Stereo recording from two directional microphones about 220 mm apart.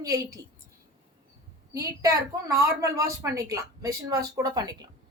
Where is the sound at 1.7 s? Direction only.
15° right (ahead or behind).